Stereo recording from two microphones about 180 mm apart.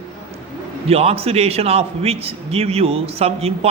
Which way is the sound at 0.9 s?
35° right (ahead or behind).